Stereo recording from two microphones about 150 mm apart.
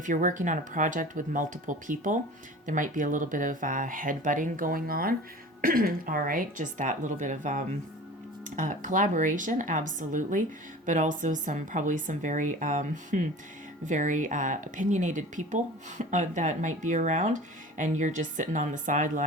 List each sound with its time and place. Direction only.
0.0 s speech: 60° right (ahead or behind)